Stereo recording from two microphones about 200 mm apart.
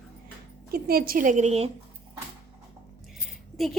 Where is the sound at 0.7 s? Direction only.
50° right (ahead or behind); by 1.7 s 35° right (ahead or behind).